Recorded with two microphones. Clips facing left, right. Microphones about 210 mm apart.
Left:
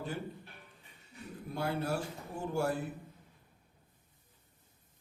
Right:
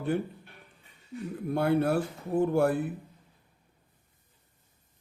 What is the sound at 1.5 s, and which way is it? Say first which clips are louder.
A man's voice: right 9 dB; 60° right (ahead or behind).